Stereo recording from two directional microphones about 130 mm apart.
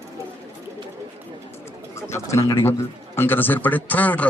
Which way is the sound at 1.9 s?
20° left (ahead or behind).